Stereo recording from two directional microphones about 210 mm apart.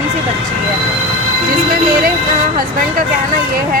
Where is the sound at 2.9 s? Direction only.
45° right (ahead or behind).